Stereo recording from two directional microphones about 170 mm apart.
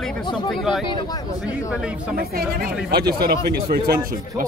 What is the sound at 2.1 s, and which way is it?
Speech, 60° right (ahead or behind).